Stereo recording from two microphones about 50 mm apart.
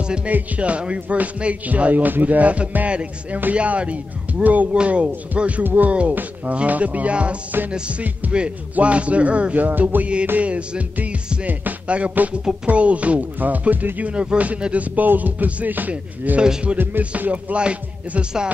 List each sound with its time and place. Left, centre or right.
0.0 s speech: centre
0.3 s music: right
1.0 s speech: right
3.5 s music: right
5.6 s speech: right
5.9 s music: right
10.4 s music: right
12.6 s speech: right
14.1 s music: right
14.6 s speech: right
15.9 s music: right
16.7 s music: right
17.2 s music: right